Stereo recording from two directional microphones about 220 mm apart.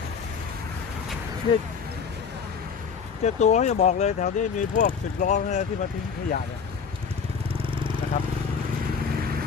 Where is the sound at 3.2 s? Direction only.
30° left (ahead or behind).